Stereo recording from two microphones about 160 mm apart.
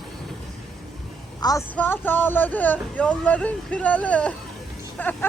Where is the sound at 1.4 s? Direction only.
25° left (ahead or behind).